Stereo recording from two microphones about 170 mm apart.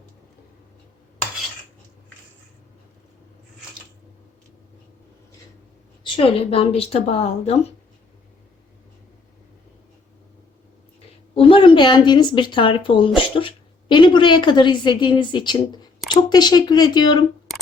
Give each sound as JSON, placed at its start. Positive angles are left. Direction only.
{"t": 6.0, "sound": "speech", "side_deg": 30}
{"t": 11.3, "sound": "a woman's voice", "side_deg": 30}